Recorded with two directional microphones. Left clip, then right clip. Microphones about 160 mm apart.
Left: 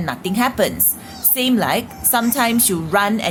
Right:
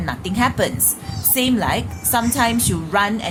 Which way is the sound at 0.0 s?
20° left (ahead or behind).